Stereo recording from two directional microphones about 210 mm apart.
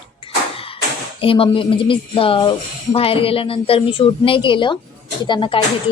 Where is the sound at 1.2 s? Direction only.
25° left (ahead or behind).